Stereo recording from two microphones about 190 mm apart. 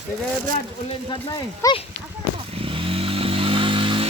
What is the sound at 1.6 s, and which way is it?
Speech, 15° left (ahead or behind).